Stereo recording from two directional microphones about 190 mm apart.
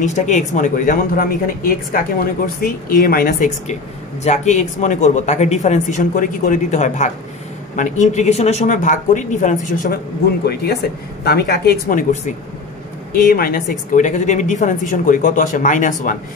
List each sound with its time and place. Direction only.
0.0 s a woman's voice: 40° left (ahead or behind)
10.4 s a woman's voice: 60° left (ahead or behind); by 16.2 s 40° left (ahead or behind)